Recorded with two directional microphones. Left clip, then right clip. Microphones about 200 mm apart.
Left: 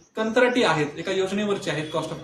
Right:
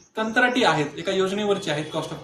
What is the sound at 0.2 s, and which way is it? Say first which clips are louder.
Speech: even; 15° left (ahead or behind).